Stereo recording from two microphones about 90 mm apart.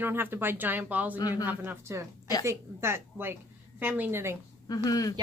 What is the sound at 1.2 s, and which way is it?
Speech, 45° left (ahead or behind).